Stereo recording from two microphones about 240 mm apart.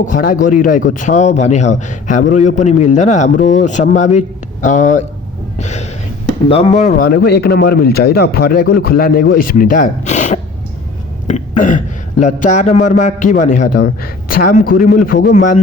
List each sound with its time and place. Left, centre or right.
0.0 s a man's voice: left
5.5 s gasp: left
6.5 s a man's voice: left
7.0 s a man's voice: left
11.3 s a sound: left
12.2 s a man's voice: left